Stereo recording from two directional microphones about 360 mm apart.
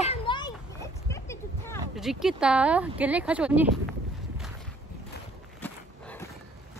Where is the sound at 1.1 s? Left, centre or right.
Centre.